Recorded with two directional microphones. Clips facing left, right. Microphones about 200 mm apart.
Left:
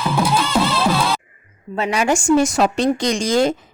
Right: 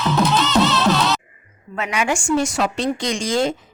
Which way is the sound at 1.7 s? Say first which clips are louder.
Left 4 dB; 35° left (ahead or behind).